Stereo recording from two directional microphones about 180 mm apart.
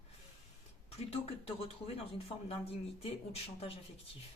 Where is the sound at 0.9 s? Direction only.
30° left (ahead or behind).